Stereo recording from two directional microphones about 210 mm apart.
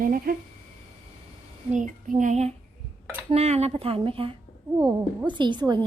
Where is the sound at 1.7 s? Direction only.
35° right (ahead or behind).